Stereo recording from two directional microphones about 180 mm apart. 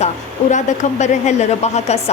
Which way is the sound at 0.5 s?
40° left (ahead or behind).